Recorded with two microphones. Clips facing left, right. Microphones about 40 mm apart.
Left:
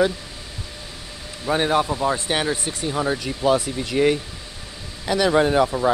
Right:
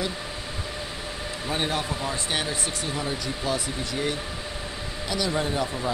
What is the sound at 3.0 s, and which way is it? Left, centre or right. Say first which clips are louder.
Speech: left 7 dB; left.